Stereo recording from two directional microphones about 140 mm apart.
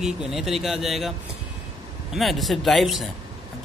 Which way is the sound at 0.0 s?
5° right (ahead or behind).